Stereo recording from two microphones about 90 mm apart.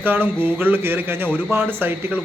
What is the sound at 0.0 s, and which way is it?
Speech, 20° right (ahead or behind).